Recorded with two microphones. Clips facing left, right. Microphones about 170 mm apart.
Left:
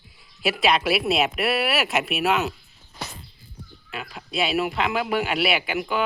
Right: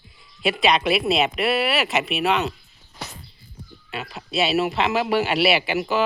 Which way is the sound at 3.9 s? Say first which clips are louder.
Right 3 dB; 5° right (ahead or behind).